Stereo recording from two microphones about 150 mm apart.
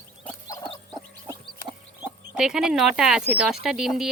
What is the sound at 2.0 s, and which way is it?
Speech, 5° right (ahead or behind).